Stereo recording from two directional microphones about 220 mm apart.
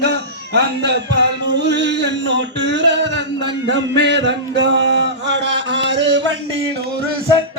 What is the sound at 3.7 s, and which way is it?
Music, 50° right (ahead or behind).